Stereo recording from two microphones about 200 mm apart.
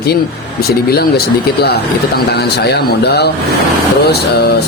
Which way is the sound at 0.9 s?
50° left (ahead or behind).